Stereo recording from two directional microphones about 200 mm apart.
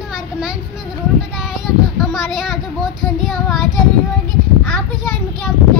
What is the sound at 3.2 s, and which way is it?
Child singing, centre (ahead or behind).